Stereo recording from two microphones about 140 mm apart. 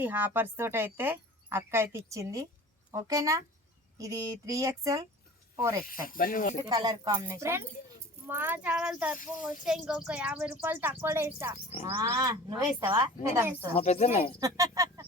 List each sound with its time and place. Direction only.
0.0 s speech: 15° right (ahead or behind)
5.8 s speech: 90° left
6.6 s speech: 25° right (ahead or behind)
11.7 s speech: 50° left (ahead or behind)
12.0 s speech: 25° right (ahead or behind)
13.2 s speech: 20° right (ahead or behind)
13.7 s speech: 50° left (ahead or behind)
14.3 s speech: 25° right (ahead or behind)